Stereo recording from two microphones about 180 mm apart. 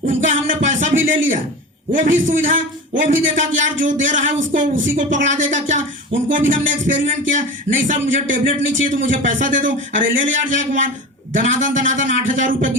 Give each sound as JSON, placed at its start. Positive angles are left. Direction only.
{"t": 0.3, "sound": "music", "side_deg": -45}
{"t": 1.9, "sound": "speech", "side_deg": -45}